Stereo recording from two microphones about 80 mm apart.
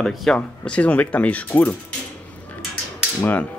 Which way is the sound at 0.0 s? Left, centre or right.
Centre.